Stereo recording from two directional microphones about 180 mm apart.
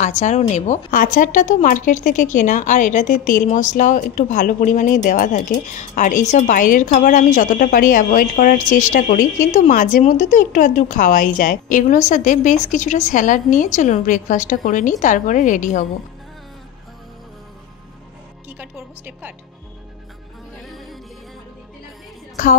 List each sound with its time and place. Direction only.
0.0 s a woman's voice: 40° left (ahead or behind)
18.6 s music: 10° right (ahead or behind)
22.4 s a woman's voice: 45° left (ahead or behind)